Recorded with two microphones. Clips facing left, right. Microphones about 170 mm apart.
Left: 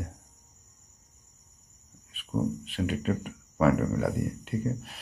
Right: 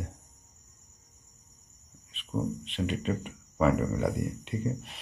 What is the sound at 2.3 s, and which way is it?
Speech, 5° left (ahead or behind).